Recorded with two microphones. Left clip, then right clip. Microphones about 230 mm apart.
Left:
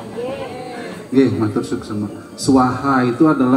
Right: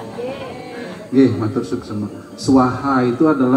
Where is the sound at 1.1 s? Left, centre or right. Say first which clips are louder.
Even; left.